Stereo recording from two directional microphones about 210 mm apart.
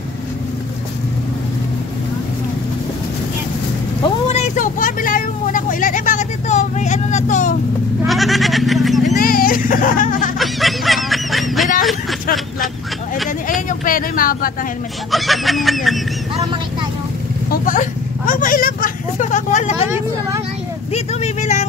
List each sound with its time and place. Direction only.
4.3 s vehicle: 35° left (ahead or behind)
8.0 s goat: centre (ahead or behind)
9.2 s a sound: 45° left (ahead or behind)
10.4 s fowl: centre (ahead or behind)
11.8 s a sound: centre (ahead or behind)
13.5 s vehicle: 40° left (ahead or behind)
15.0 s speech: centre (ahead or behind)
17.5 s a sound: 40° left (ahead or behind)
20.9 s vehicle: 30° left (ahead or behind)